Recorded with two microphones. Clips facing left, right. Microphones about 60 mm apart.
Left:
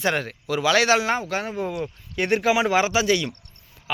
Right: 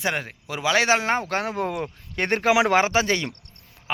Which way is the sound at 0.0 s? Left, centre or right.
Centre.